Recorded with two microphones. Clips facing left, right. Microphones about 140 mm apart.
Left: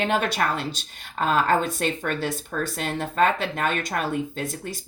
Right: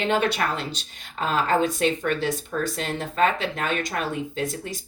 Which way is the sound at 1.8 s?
45° left (ahead or behind).